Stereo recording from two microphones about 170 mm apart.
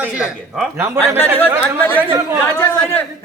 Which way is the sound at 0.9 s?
10° left (ahead or behind).